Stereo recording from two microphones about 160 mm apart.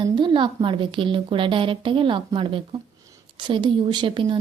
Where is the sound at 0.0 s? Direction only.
30° right (ahead or behind).